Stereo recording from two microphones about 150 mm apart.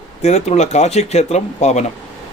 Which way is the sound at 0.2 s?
45° left (ahead or behind).